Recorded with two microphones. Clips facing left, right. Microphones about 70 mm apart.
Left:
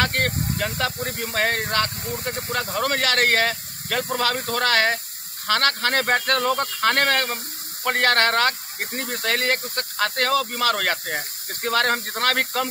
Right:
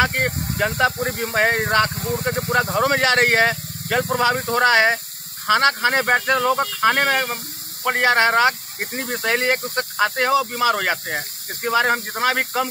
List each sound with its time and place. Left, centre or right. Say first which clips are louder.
0.0 s snake: right 3 dB; centre
0.6 s speech: right 10 dB; right